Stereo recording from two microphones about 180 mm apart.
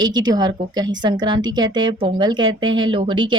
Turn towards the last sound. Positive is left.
turn(degrees=-25)  # may be behind; listen again after turning